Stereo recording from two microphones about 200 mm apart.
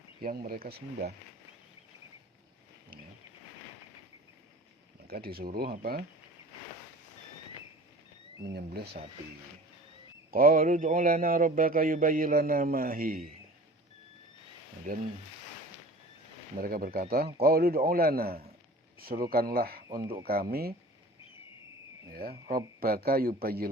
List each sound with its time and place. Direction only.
0.2 s a man's voice: 50° right (ahead or behind)
5.0 s a man's voice: 50° right (ahead or behind)
8.4 s a man's voice: 55° right (ahead or behind)
10.3 s a man's voice: 45° right (ahead or behind)
16.6 s a man's voice: 45° right (ahead or behind)
20.0 s speech: 20° right (ahead or behind)
20.2 s a man's voice: 50° right (ahead or behind)
22.1 s a man's voice: 50° right (ahead or behind)